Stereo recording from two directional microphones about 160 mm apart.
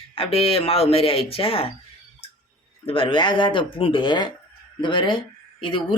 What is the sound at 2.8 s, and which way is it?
Speech, 35° left (ahead or behind).